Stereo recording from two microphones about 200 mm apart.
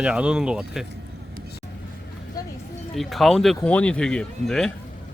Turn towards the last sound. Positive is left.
turn(degrees=5)  # may be behind; listen again after turning